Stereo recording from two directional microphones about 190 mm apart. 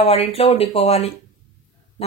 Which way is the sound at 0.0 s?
35° left (ahead or behind).